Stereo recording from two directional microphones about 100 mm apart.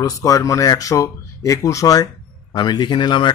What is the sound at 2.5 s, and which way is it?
Speech, 50° left (ahead or behind).